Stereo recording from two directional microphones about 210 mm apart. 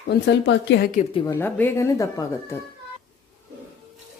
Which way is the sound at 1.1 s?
15° left (ahead or behind).